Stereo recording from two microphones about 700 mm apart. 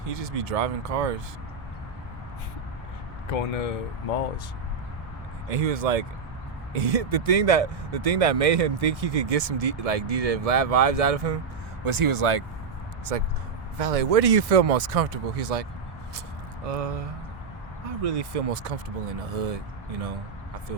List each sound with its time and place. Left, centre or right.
0.0 s speech: right
3.2 s speech: left
5.5 s speech: right
16.6 s speech: right
18.0 s speech: right